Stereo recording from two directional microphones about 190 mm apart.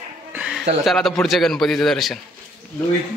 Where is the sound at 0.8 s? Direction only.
Centre (ahead or behind).